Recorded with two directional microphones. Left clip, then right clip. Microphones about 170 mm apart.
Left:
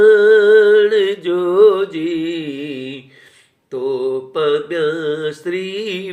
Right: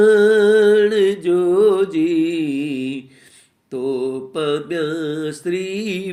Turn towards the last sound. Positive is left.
turn(degrees=-30)  # may be behind; listen again after turning